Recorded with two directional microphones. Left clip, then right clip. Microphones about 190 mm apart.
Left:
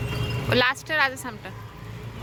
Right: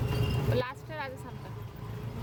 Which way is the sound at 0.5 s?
20° left (ahead or behind).